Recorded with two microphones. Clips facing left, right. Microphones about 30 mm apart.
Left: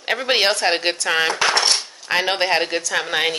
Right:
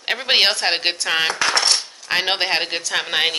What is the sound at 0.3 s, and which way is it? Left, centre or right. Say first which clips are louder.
Speech: right 1 dB; right.